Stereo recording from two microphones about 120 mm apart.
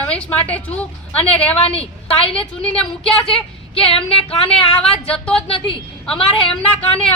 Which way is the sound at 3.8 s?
50° left (ahead or behind).